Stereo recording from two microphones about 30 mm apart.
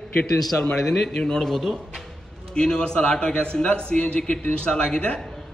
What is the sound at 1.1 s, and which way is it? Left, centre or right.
Speech, centre.